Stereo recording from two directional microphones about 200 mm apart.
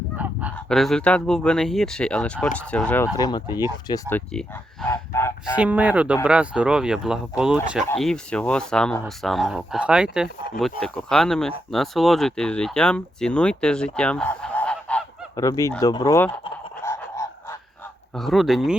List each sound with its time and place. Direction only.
0.2 s honk: 10° right (ahead or behind)
0.5 s speech: centre (ahead or behind); by 3.4 s 20° left (ahead or behind)
4.1 s speech: 5° left (ahead or behind)
4.9 s fowl: 15° left (ahead or behind)
5.5 s speech: 5° right (ahead or behind)
15.4 s speech: 15° left (ahead or behind)
16.8 s honk: 15° left (ahead or behind)
18.1 s speech: centre (ahead or behind)